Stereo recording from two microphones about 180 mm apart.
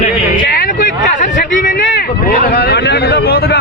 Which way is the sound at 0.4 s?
55° left (ahead or behind).